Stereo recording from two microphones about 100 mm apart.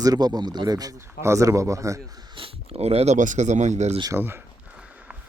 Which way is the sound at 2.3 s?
70° right (ahead or behind).